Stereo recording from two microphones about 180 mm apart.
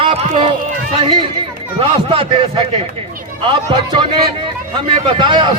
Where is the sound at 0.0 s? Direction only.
30° right (ahead or behind).